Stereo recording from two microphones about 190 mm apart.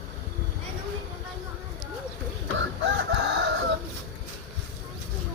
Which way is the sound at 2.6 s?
70° right (ahead or behind).